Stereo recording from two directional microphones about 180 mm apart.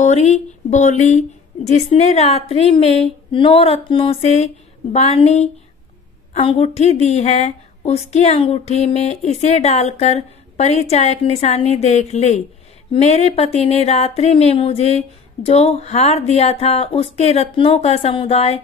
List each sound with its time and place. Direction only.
0.0 s speech: 40° left (ahead or behind)